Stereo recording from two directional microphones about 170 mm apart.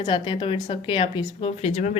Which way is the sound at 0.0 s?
30° left (ahead or behind).